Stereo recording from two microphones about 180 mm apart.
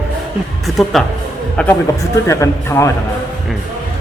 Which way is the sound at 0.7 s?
Centre (ahead or behind).